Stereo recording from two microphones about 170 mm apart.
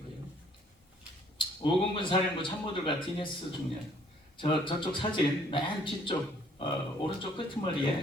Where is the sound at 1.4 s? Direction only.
30° left (ahead or behind).